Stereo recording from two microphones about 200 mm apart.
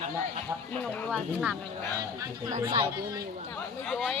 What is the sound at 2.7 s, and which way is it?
Speech, 25° right (ahead or behind).